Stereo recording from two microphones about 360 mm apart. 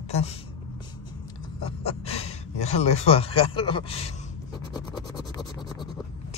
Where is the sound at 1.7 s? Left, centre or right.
Centre.